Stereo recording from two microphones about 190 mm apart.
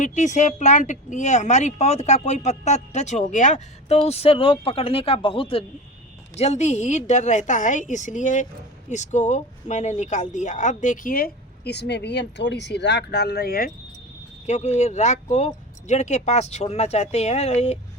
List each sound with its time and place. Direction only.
0.0 s speech: 40° left (ahead or behind)
14.4 s speech: 35° left (ahead or behind)